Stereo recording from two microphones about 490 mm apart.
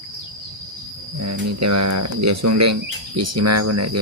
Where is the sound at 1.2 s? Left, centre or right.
Right.